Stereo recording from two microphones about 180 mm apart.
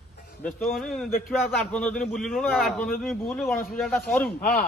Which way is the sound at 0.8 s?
Centre (ahead or behind).